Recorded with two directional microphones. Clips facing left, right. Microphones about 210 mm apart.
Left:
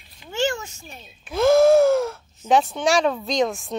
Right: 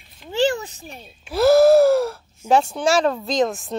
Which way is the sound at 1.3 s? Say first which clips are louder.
Right 2 dB; 5° right (ahead or behind).